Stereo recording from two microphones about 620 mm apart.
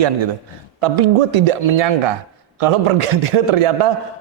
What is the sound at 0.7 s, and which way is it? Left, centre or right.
A man's voice, right.